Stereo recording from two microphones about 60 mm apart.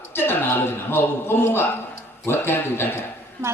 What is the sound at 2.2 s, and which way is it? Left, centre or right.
Speech, left.